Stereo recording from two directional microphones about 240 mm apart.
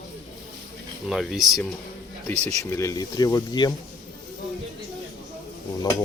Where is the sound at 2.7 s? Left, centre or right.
Centre.